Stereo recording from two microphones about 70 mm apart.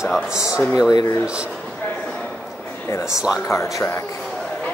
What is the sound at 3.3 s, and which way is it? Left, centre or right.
Speech, left.